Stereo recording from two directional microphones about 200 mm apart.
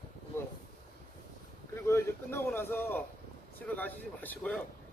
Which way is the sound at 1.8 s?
15° left (ahead or behind).